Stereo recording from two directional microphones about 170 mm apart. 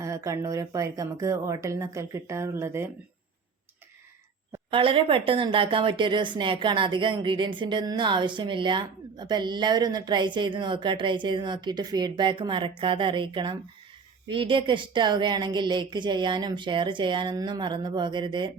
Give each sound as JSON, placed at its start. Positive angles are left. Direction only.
{"t": 0.0, "sound": "speech", "side_deg": -20}
{"t": 4.7, "sound": "a woman's voice", "side_deg": -30}